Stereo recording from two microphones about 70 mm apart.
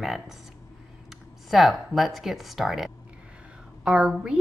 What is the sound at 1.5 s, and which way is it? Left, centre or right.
A woman's voice, centre.